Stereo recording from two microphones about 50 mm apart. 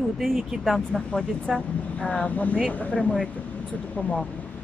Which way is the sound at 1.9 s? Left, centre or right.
Left.